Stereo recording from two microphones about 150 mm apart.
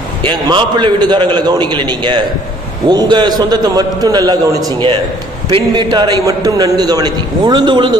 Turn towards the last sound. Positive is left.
turn(degrees=-30)  # may be behind; listen again after turning